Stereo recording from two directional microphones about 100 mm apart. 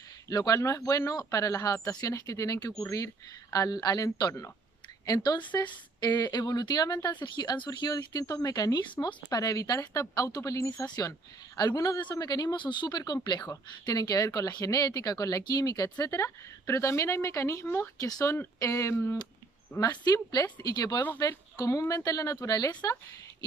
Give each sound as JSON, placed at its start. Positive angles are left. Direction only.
{"t": 0.3, "sound": "a woman's voice", "side_deg": 35}
{"t": 17.9, "sound": "speech", "side_deg": 40}
{"t": 18.3, "sound": "speech", "side_deg": 25}
{"t": 19.8, "sound": "speech", "side_deg": 40}